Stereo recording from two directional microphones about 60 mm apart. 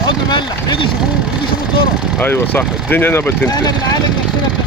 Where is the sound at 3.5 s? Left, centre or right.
Left.